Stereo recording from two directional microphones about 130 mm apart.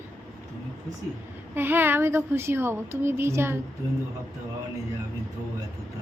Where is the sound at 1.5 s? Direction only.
15° right (ahead or behind).